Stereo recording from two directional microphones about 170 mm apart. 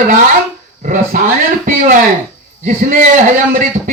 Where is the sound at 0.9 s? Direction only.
50° right (ahead or behind).